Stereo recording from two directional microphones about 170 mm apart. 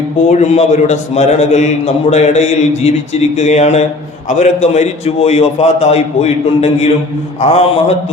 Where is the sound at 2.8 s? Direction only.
40° left (ahead or behind).